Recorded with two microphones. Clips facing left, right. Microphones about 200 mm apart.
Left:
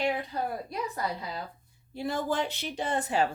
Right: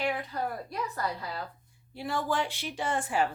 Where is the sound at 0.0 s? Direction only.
20° left (ahead or behind).